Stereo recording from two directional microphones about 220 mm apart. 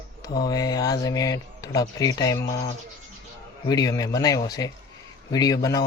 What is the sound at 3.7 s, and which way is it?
Speech, 15° left (ahead or behind).